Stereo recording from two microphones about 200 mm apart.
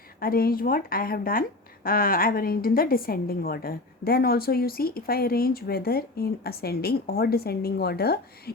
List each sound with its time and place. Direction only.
0.2 s a woman's voice: 50° left (ahead or behind)